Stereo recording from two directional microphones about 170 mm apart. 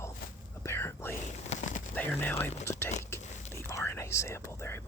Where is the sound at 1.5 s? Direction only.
45° left (ahead or behind).